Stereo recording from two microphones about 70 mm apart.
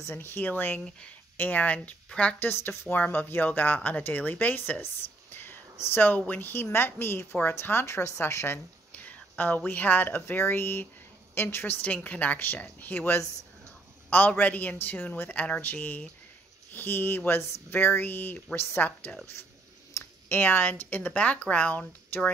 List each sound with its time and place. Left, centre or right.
0.0 s speech: left; by 2.3 s centre
2.4 s speech: left
8.9 s a sound: left
9.7 s speech: left